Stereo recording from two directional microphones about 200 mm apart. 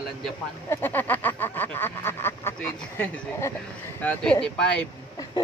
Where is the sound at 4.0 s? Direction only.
5° left (ahead or behind).